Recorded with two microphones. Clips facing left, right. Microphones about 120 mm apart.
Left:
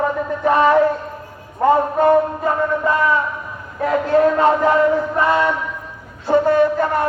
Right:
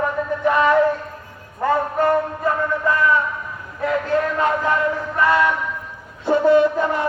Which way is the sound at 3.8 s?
30° left (ahead or behind).